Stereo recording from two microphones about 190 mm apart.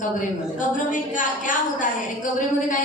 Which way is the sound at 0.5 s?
45° left (ahead or behind).